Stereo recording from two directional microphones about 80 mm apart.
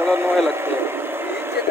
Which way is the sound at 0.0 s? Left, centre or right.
Right.